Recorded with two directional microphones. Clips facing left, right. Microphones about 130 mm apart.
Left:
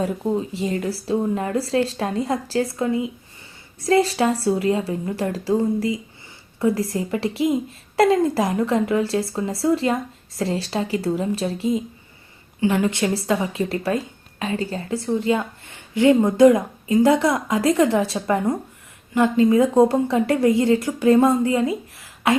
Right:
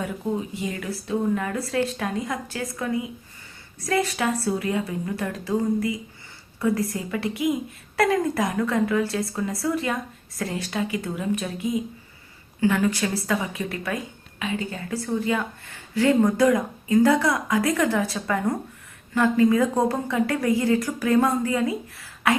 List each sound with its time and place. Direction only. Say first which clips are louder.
0.6 s a woman's voice: left 6 dB; 30° left (ahead or behind)